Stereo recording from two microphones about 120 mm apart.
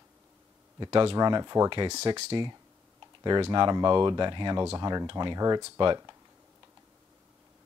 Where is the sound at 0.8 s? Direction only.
40° right (ahead or behind).